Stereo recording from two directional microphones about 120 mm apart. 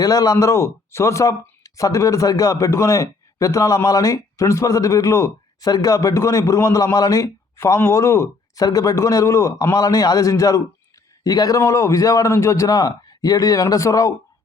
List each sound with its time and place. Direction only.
0.0 s speech: 30° left (ahead or behind)